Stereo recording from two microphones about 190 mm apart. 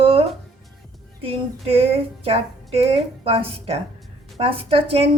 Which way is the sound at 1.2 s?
30° right (ahead or behind).